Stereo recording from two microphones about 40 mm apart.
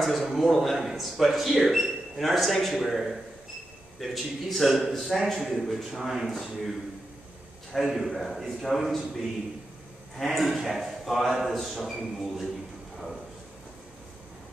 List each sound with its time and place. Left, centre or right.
0.0 s speech: centre
7.7 s speech: centre
10.1 s speech: centre